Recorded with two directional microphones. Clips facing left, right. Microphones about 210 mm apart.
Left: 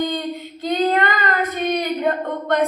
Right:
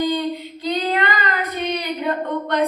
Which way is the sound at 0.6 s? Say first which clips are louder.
Left 3 dB; 50° left (ahead or behind).